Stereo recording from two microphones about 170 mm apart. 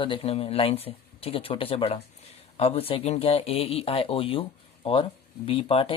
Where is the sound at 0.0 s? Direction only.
30° left (ahead or behind).